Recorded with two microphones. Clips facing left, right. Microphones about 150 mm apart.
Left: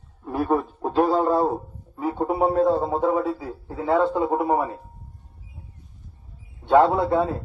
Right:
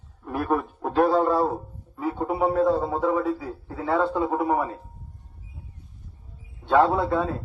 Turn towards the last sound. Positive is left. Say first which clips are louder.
# left 2 dB
turn(degrees=25)  # may be behind; listen again after turning